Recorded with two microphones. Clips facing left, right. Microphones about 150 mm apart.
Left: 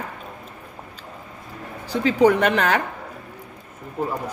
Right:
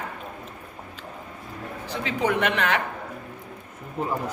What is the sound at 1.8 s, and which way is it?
Speech, 35° left (ahead or behind).